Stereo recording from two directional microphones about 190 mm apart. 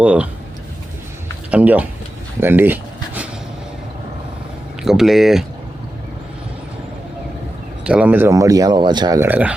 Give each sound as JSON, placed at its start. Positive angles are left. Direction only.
{"t": 0.0, "sound": "speech", "side_deg": -5}
{"t": 1.5, "sound": "speech", "side_deg": -5}
{"t": 4.8, "sound": "speech", "side_deg": 0}
{"t": 7.9, "sound": "speech", "side_deg": -5}